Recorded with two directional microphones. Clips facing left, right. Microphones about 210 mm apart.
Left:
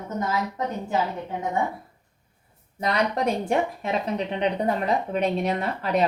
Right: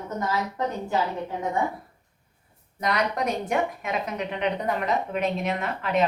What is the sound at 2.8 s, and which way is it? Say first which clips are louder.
Speech: left 2 dB; 30° left (ahead or behind).